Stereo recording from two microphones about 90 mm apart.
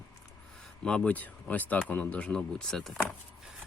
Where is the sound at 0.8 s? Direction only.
15° left (ahead or behind).